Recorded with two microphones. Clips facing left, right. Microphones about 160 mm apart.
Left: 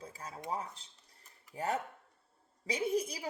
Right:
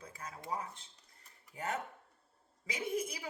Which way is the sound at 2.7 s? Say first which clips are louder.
Left 4 dB; 35° left (ahead or behind).